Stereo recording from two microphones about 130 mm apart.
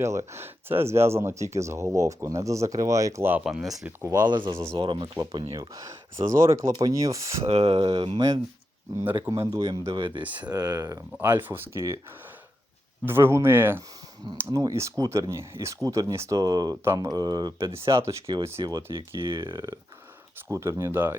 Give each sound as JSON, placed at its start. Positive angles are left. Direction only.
{"t": 0.0, "sound": "speech", "side_deg": -20}
{"t": 4.3, "sound": "speech", "side_deg": -35}
{"t": 4.5, "sound": "speech", "side_deg": -20}
{"t": 4.8, "sound": "speech", "side_deg": -40}
{"t": 5.5, "sound": "speech", "side_deg": -25}
{"t": 7.4, "sound": "speech", "side_deg": -50}
{"t": 7.9, "sound": "speech", "side_deg": -35}
{"t": 9.0, "sound": "speech", "side_deg": -15}
{"t": 10.0, "sound": "speech", "side_deg": -40}
{"t": 11.1, "sound": "speech", "side_deg": -15}
{"t": 13.1, "sound": "speech", "side_deg": -20}
{"t": 17.7, "sound": "speech", "side_deg": -20}
{"t": 18.6, "sound": "speech", "side_deg": -35}